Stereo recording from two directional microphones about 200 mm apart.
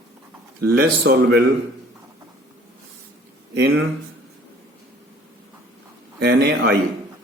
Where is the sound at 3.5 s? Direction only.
55° right (ahead or behind).